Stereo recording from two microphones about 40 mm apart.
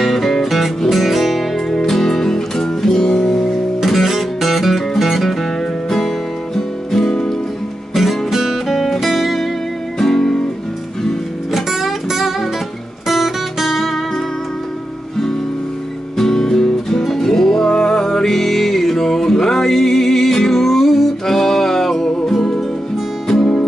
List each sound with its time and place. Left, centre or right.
0.0 s music: centre; by 3.3 s left
3.8 s music: centre
7.9 s music: centre
9.9 s music: centre
11.5 s music: centre
16.2 s music: centre